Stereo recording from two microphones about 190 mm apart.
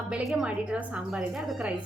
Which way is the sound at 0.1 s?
Centre (ahead or behind).